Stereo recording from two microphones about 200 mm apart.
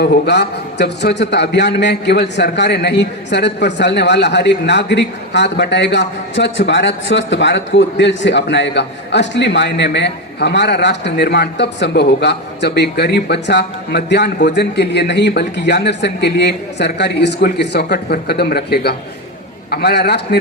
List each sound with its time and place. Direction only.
0.0 s a man's voice: 55° left (ahead or behind)